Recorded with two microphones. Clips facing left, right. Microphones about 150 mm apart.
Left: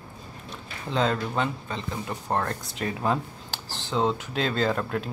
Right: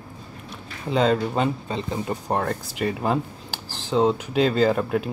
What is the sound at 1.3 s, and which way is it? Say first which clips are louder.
Speech: right 5 dB; 20° right (ahead or behind).